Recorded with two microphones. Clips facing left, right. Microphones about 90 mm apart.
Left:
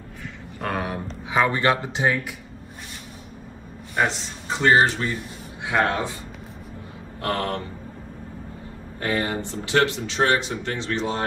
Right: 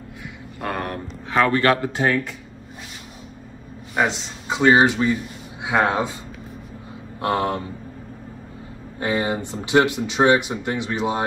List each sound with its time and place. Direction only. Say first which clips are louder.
0.6 s speech: even; centre (ahead or behind); by 2.1 s 20° left (ahead or behind)
4.0 s speech: right 2 dB; 10° right (ahead or behind)
7.2 s speech: right 4 dB; 20° right (ahead or behind)
9.0 s speech: right 2 dB; 20° right (ahead or behind)